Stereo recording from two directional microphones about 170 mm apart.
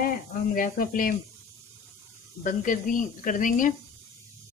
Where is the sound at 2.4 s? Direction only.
50° left (ahead or behind).